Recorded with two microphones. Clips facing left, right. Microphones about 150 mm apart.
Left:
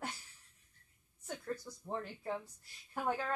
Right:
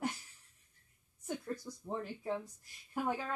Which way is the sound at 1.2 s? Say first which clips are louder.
Right 2 dB; 15° right (ahead or behind).